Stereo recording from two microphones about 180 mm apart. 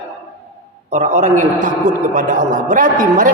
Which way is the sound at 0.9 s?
40° right (ahead or behind).